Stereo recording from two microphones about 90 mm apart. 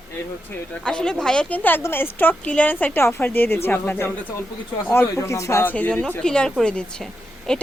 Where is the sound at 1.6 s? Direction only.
20° left (ahead or behind).